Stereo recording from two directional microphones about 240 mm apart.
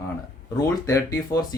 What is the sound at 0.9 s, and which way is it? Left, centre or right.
Speech, centre.